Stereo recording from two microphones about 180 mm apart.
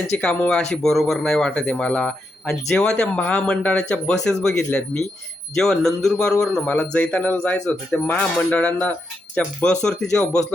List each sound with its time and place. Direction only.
0.2 s speech: 5° left (ahead or behind)